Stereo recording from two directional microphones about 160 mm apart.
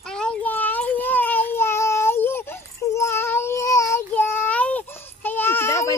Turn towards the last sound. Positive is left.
turn(degrees=20)  # may be behind; listen again after turning